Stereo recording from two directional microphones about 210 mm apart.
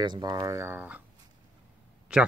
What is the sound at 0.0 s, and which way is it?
Speech, 20° right (ahead or behind).